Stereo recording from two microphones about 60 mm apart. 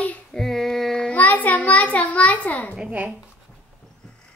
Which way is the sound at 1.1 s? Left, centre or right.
Left.